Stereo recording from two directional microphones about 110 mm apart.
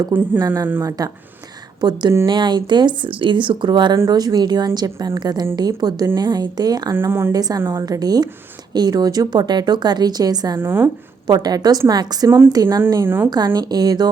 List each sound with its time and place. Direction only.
0.3 s a woman's voice: 35° right (ahead or behind)
3.9 s a woman's voice: 35° right (ahead or behind)
6.9 s a woman's voice: 20° right (ahead or behind)
7.3 s a woman's voice: 35° right (ahead or behind)
10.6 s a woman's voice: 20° right (ahead or behind)
11.3 s a woman's voice: 40° right (ahead or behind)
12.9 s a woman's voice: 20° right (ahead or behind)
13.3 s a woman's voice: 35° right (ahead or behind)